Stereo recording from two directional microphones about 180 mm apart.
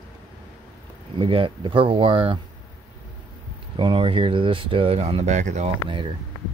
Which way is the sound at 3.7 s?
25° right (ahead or behind).